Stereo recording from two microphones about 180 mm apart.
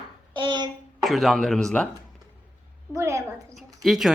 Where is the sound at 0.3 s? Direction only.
25° right (ahead or behind).